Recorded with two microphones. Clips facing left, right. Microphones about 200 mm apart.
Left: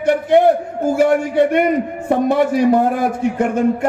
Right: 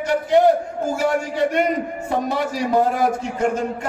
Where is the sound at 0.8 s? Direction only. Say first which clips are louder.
Left 7 dB; 55° left (ahead or behind).